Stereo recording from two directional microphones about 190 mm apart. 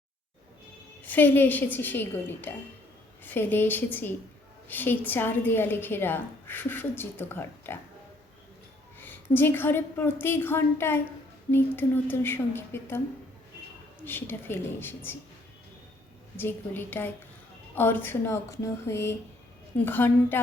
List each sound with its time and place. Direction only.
1.0 s a woman's voice: 10° left (ahead or behind)
9.0 s a woman's voice: 10° left (ahead or behind)
14.0 s a woman's voice: 10° left (ahead or behind)
16.4 s a woman's voice: 10° left (ahead or behind)